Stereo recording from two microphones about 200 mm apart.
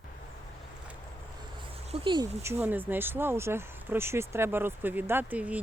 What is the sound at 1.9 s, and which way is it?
Speech, 25° right (ahead or behind).